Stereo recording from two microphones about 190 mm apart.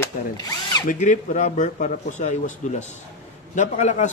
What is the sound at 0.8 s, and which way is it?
A man's voice, 40° left (ahead or behind).